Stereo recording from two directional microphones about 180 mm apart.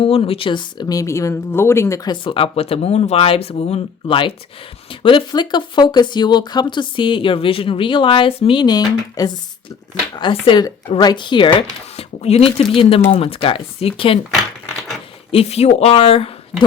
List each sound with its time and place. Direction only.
0.0 s speech: 35° left (ahead or behind)
15.3 s speech: 35° left (ahead or behind)